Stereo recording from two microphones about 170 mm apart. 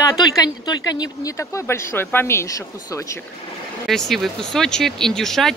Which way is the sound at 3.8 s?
Centre (ahead or behind).